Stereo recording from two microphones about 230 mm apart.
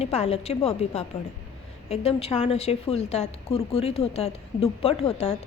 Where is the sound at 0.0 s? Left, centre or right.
Left.